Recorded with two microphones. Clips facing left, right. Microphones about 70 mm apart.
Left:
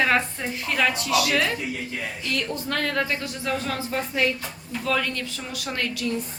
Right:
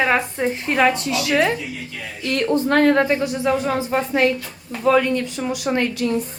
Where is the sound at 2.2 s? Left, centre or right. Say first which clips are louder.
Right 12 dB; right.